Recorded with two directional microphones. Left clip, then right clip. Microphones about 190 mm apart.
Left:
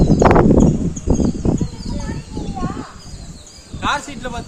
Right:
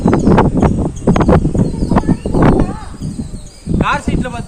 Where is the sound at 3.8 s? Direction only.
10° left (ahead or behind).